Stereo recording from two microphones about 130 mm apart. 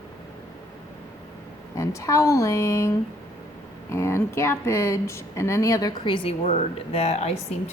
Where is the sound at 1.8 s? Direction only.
25° left (ahead or behind); by 7.4 s 55° left (ahead or behind).